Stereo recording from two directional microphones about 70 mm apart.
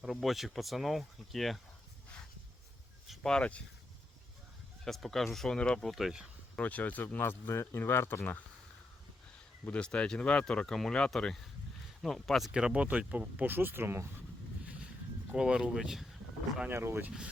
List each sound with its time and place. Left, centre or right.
0.0 s speech: centre
3.2 s speech: centre
4.9 s speech: centre
5.9 s speech: centre
6.6 s speech: left
9.6 s speech: centre
12.5 s speech: centre; by 14.1 s right
15.4 s speech: centre
16.6 s speech: right